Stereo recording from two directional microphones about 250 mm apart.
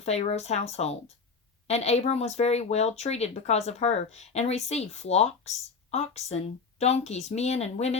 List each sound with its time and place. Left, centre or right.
0.0 s speech: left